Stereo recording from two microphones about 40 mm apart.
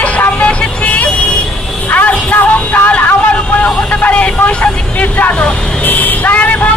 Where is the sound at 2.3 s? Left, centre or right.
Left.